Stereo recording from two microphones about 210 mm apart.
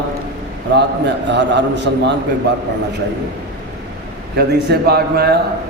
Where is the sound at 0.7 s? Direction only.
55° right (ahead or behind).